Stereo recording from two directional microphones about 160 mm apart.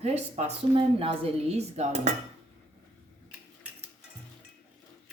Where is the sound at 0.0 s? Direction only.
40° right (ahead or behind).